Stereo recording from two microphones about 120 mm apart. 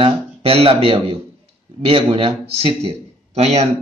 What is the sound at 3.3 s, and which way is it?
Speech, 65° right (ahead or behind).